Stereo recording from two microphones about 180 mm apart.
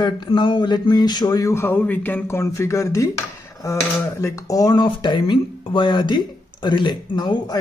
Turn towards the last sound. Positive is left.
turn(degrees=25)  # may be behind; listen again after turning